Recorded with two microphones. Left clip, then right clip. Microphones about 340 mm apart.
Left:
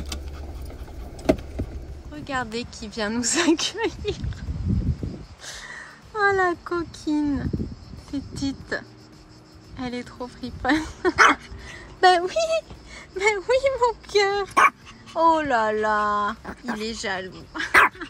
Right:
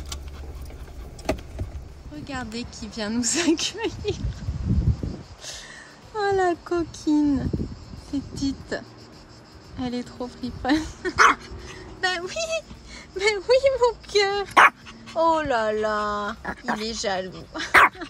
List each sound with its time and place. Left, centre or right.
2.1 s speech: centre
5.4 s speech: centre
11.1 s dog: centre
12.0 s speech: centre